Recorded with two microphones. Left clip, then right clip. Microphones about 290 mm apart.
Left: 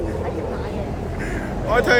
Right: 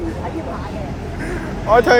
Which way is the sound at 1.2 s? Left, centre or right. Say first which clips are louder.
Right 3 dB; centre.